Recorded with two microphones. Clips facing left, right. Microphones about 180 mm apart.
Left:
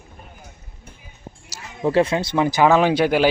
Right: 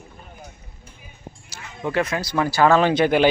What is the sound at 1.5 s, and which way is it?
Speech, 35° left (ahead or behind).